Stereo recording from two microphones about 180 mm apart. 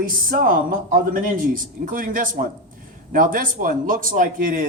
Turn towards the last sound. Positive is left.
turn(degrees=-50)  # may be behind; listen again after turning